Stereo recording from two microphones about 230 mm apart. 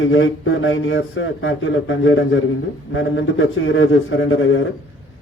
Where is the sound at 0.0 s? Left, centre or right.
Left.